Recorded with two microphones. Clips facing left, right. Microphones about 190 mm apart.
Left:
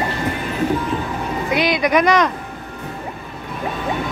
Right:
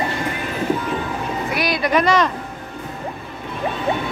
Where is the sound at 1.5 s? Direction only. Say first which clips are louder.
Left 3 dB; 20° left (ahead or behind).